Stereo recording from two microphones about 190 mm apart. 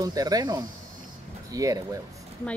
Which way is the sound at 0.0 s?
20° right (ahead or behind).